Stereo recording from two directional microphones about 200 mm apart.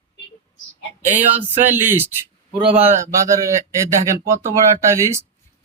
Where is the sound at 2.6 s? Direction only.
25° right (ahead or behind).